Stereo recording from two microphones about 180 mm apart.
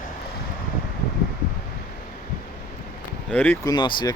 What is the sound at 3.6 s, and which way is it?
Speech, 25° left (ahead or behind).